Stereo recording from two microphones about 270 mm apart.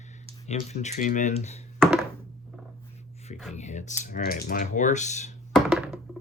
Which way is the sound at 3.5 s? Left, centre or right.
Left.